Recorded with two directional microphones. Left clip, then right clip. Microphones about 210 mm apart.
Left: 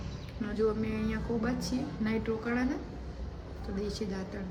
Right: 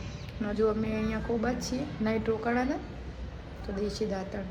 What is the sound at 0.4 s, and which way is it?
A woman's voice, centre (ahead or behind).